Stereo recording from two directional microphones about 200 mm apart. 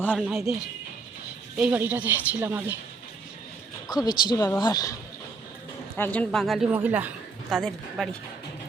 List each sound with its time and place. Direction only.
0.0 s a woman's voice: 10° left (ahead or behind)
1.5 s a woman's voice: 10° right (ahead or behind)
3.8 s a woman's voice: 20° left (ahead or behind)
6.0 s a woman's voice: 5° left (ahead or behind)